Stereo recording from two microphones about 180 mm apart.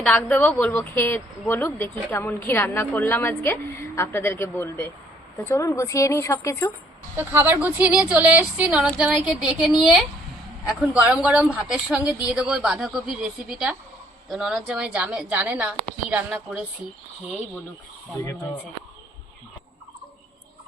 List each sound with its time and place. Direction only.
0.0 s speech: 5° left (ahead or behind)
7.2 s a woman's voice: 10° right (ahead or behind)